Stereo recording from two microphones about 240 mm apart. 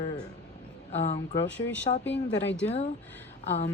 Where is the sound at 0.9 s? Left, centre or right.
Left.